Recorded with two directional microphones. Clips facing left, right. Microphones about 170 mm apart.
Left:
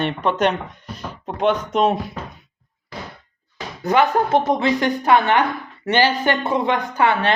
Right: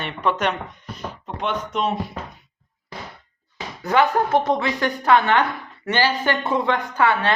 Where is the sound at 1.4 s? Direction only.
40° left (ahead or behind).